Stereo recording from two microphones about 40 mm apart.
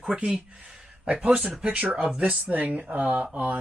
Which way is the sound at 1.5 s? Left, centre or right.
Right.